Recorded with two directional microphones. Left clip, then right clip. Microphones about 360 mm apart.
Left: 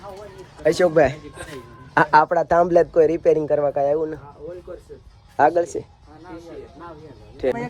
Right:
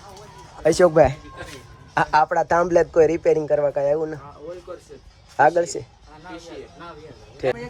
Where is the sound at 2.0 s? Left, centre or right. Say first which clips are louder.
Left 3 dB; centre.